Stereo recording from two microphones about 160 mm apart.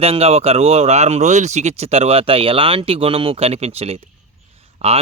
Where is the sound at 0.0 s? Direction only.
40° right (ahead or behind).